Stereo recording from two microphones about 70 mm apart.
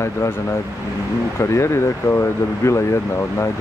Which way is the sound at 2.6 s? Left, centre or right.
Left.